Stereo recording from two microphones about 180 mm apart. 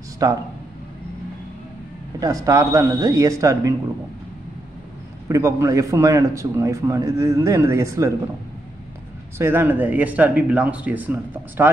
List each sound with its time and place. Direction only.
0.2 s speech: 20° right (ahead or behind)
2.1 s speech: 20° right (ahead or behind)
5.3 s a man's voice: 20° right (ahead or behind)
9.4 s a man's voice: 10° right (ahead or behind)